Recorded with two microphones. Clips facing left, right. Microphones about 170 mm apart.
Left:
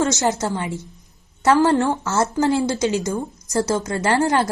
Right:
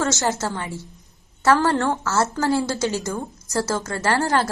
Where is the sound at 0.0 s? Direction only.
20° left (ahead or behind).